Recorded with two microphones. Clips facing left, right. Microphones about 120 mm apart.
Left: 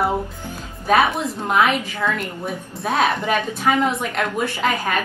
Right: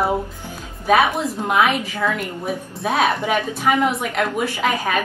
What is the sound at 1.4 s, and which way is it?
A woman's voice, 5° right (ahead or behind).